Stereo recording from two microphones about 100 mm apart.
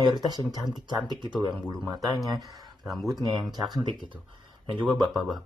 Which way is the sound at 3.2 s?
40° right (ahead or behind).